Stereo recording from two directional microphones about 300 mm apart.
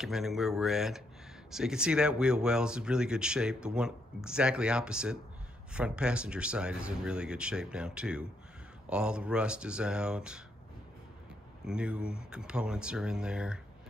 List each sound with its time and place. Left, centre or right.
0.0 s speech: centre
11.6 s speech: centre